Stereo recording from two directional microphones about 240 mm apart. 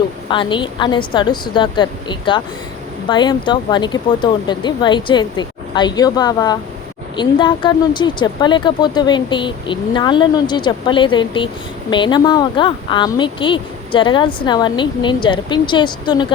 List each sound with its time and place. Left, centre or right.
0.3 s a woman's voice: centre